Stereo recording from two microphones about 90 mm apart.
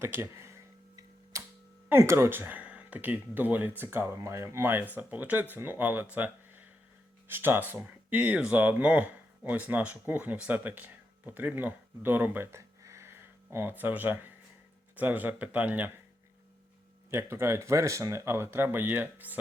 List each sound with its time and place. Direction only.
0.0 s a sound: 25° right (ahead or behind)
1.9 s speech: 30° right (ahead or behind)
4.2 s speech: 35° right (ahead or behind); by 15.9 s 15° right (ahead or behind)
17.1 s speech: 30° right (ahead or behind)